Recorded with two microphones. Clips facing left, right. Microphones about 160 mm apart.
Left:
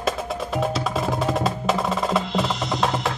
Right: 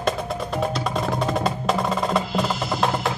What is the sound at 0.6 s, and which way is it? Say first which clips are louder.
Percussion: left 1 dB; centre (ahead or behind).